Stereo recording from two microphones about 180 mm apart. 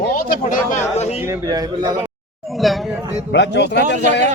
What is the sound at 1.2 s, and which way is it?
Speech, 20° right (ahead or behind).